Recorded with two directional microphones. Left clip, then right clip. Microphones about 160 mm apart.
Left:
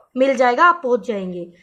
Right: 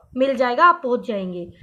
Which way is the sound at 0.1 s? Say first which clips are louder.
Left 4 dB; 50° left (ahead or behind).